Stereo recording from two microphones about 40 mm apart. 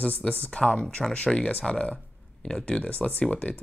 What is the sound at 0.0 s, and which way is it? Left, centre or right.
Speech, left.